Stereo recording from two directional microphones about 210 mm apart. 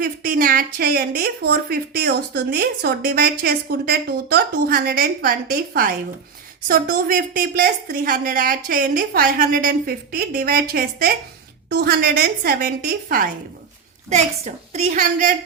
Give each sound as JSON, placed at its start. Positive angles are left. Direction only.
{"t": 0.0, "sound": "a woman's voice", "side_deg": -45}
{"t": 14.1, "sound": "a woman's voice", "side_deg": -30}